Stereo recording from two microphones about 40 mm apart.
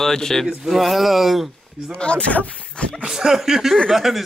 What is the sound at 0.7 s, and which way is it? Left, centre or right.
Speech, centre.